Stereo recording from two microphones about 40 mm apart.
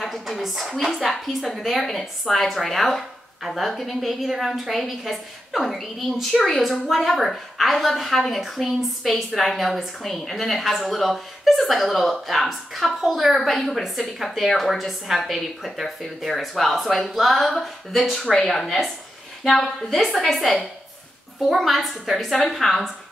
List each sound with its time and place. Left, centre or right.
0.0 s a woman's voice: centre
18.3 s a woman's voice: centre
19.4 s a woman's voice: centre